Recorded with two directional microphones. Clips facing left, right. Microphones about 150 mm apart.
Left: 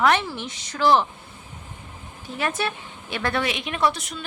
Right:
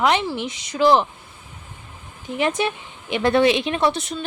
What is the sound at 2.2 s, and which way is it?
A woman's voice, 15° right (ahead or behind).